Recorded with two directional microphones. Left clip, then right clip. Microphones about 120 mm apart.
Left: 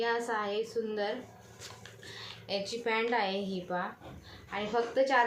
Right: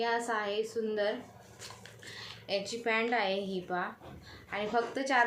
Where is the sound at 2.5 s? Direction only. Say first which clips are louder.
Right 1 dB; 35° right (ahead or behind).